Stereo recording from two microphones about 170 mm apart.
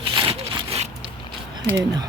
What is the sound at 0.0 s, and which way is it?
Sawing, 30° right (ahead or behind).